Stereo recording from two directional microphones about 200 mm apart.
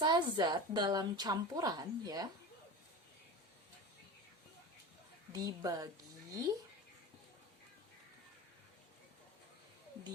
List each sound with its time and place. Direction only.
0.0 s a woman's voice: 20° right (ahead or behind)
5.3 s speech: 20° right (ahead or behind)